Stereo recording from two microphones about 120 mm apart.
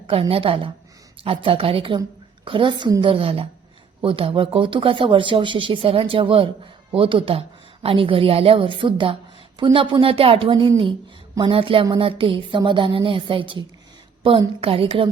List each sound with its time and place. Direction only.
0.1 s speech: 50° right (ahead or behind)